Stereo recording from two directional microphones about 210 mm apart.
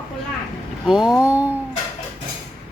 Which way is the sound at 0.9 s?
Centre (ahead or behind).